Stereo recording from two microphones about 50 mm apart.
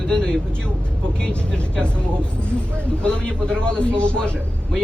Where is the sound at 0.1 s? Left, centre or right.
Centre.